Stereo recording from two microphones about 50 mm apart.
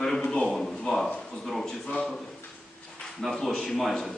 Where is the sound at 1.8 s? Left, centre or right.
Left.